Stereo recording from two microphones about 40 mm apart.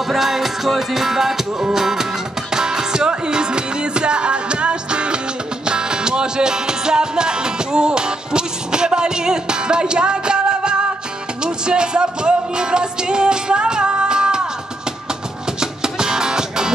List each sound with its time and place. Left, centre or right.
0.1 s music: centre
15.6 s music: centre